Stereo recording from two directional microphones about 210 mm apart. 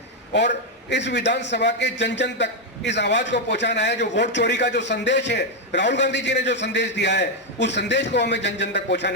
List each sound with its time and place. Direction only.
0.3 s a man's voice: 55° left (ahead or behind)